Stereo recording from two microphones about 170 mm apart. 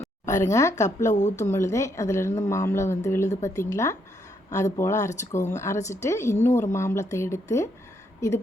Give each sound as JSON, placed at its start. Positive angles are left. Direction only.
{"t": 0.3, "sound": "a woman's voice", "side_deg": 15}
{"t": 1.0, "sound": "speech", "side_deg": 45}
{"t": 1.4, "sound": "a woman's voice", "side_deg": 15}